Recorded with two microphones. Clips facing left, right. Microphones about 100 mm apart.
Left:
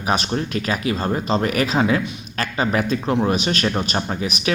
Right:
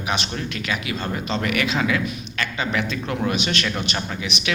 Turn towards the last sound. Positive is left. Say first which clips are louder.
# left 4 dB
turn(degrees=40)  # may be behind; listen again after turning